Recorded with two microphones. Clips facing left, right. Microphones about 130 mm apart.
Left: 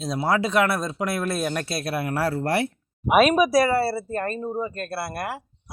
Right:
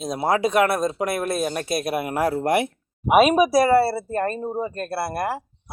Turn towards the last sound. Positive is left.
turn(degrees=-35)  # may be behind; listen again after turning